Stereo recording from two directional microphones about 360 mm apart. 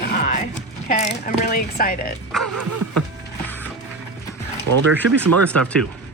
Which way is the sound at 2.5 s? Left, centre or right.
Right.